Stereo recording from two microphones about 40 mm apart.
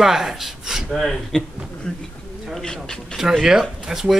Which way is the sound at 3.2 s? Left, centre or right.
Centre.